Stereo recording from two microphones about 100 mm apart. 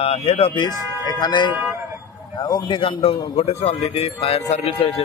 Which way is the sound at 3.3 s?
90° left.